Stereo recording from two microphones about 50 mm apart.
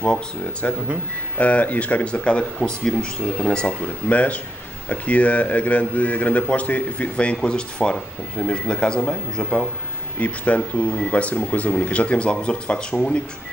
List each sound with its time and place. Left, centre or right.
0.0 s speech: left
10.1 s speech: left